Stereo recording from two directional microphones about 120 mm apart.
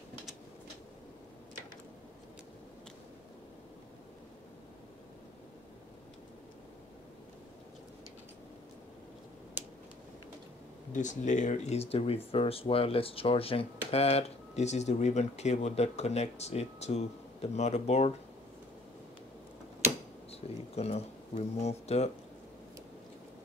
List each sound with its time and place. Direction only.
9.6 s finger snapping: 15° right (ahead or behind)
10.9 s speech: 90° left; by 18.1 s 65° left (ahead or behind)
20.2 s speech: 60° left (ahead or behind)